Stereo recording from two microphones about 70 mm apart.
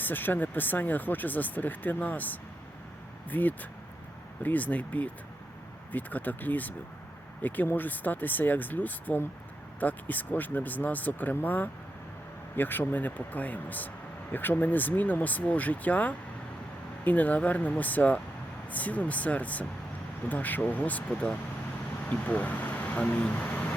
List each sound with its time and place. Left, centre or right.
0.0 s speech: left